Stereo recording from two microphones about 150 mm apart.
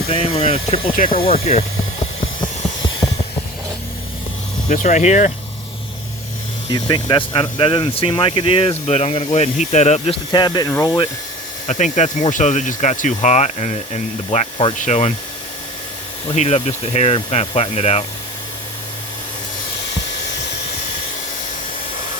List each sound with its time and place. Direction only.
0.1 s speech: 40° left (ahead or behind)
0.9 s speech: 70° left (ahead or behind)
1.2 s speech: 40° left (ahead or behind)
4.7 s speech: 55° left (ahead or behind)
6.7 s speech: 30° left (ahead or behind); by 10.2 s 50° left (ahead or behind)
10.3 s speech: 30° left (ahead or behind)
11.7 s speech: 55° left (ahead or behind)
16.2 s speech: 45° left (ahead or behind)